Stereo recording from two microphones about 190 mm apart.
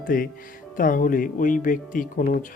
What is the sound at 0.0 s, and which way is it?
Speech, 45° left (ahead or behind).